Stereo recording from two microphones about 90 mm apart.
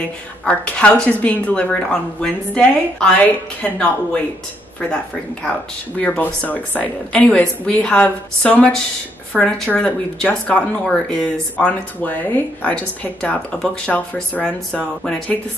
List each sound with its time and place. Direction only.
0.5 s speech: 15° left (ahead or behind)
5.9 s speech: 15° left (ahead or behind)